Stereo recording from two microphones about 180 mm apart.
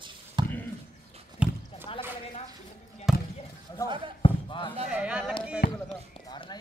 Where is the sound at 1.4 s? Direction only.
5° right (ahead or behind).